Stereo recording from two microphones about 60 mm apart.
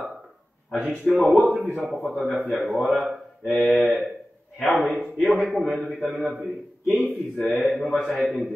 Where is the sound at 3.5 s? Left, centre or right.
Centre.